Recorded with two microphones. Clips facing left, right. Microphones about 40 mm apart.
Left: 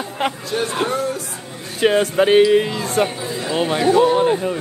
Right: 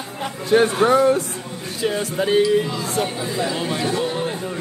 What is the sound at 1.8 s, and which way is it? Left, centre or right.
Speech, left.